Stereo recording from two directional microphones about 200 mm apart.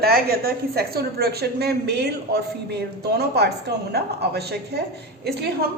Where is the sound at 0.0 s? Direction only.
50° right (ahead or behind).